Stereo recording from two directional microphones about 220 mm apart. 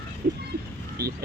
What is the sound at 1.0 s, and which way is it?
Speech, 45° right (ahead or behind).